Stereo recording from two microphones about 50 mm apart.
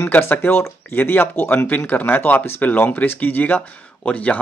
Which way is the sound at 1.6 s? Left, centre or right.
Left.